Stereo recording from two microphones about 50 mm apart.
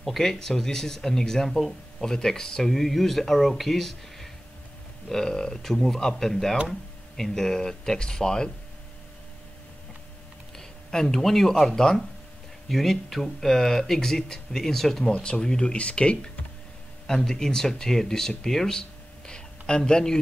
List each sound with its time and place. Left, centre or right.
0.0 s speech: centre
10.6 s a sound: centre
11.6 s speech: centre
15.1 s speech: left